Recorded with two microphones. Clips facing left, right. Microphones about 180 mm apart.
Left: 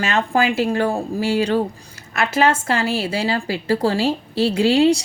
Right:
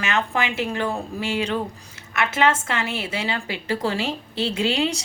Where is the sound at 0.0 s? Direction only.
35° left (ahead or behind).